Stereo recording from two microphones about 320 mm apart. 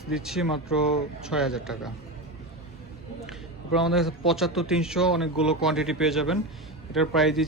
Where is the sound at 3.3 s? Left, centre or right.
Centre.